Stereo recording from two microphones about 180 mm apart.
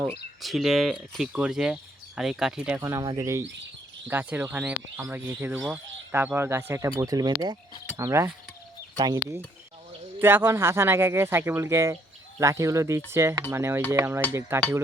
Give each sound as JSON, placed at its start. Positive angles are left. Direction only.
{"t": 0.4, "sound": "speech", "side_deg": 0}
{"t": 10.2, "sound": "speech", "side_deg": -10}